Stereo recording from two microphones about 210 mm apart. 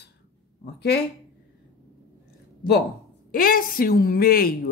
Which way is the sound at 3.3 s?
45° left (ahead or behind).